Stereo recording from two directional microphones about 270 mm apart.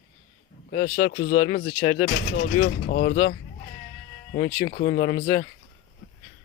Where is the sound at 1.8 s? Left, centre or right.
Centre.